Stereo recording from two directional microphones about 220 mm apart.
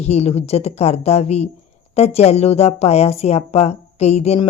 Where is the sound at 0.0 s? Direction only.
30° left (ahead or behind).